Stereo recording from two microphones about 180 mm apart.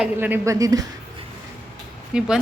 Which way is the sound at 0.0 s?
10° right (ahead or behind).